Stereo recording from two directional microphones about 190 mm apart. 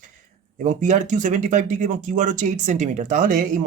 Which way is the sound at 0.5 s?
40° right (ahead or behind).